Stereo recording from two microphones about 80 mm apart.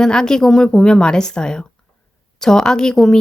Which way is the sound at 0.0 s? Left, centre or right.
Centre.